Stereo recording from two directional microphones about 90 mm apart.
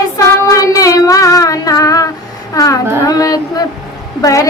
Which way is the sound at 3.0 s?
45° left (ahead or behind).